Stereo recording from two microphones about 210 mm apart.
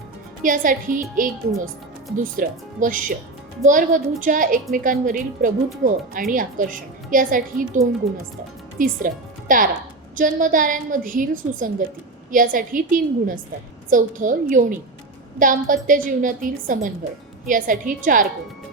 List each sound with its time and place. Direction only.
0.4 s a woman's voice: 40° right (ahead or behind)
2.1 s a woman's voice: 40° right (ahead or behind)
8.8 s a woman's voice: 40° right (ahead or behind)